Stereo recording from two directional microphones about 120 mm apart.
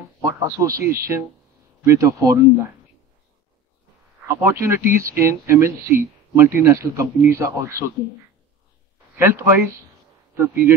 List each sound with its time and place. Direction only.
0.2 s speech: 25° right (ahead or behind)
4.3 s speech: 20° right (ahead or behind)
9.1 s speech: 20° right (ahead or behind)